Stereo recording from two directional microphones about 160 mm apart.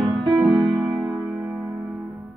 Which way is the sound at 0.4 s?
30° right (ahead or behind).